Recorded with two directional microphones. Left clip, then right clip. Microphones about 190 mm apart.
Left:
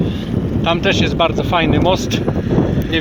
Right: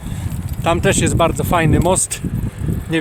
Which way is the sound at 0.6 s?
10° right (ahead or behind).